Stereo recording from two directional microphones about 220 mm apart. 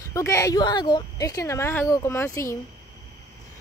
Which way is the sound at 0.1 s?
15° left (ahead or behind).